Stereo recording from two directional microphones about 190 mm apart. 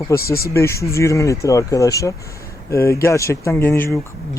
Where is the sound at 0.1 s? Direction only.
15° left (ahead or behind).